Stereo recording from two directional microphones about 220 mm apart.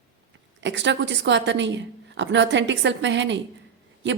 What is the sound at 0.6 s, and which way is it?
A woman's voice, 55° right (ahead or behind).